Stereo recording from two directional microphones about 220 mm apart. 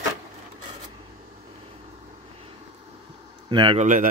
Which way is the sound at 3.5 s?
25° right (ahead or behind).